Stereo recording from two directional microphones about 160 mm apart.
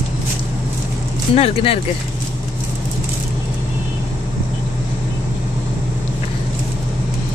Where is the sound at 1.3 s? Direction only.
40° left (ahead or behind).